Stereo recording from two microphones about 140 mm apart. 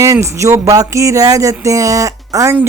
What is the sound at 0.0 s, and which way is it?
Speech, 20° right (ahead or behind).